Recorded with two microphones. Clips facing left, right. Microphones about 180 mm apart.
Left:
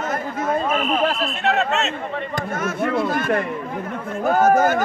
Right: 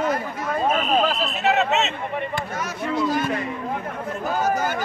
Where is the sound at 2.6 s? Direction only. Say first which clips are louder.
Left 4 dB; 55° left (ahead or behind).